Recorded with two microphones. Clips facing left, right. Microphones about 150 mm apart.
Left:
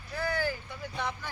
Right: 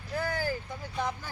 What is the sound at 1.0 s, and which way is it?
Speech, 40° right (ahead or behind).